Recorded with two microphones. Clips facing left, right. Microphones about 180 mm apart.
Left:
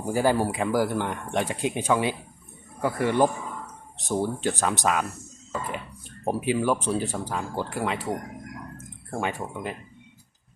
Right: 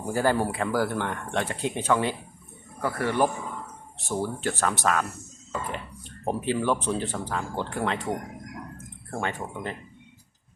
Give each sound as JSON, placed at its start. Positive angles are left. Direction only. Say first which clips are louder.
{"t": 0.0, "sound": "speech", "louder": "left 1 dB", "side_deg": 15}
{"t": 5.5, "sound": "a sound", "louder": "left 1 dB", "side_deg": 5}
{"t": 6.2, "sound": "speech", "louder": "left 1 dB", "side_deg": 10}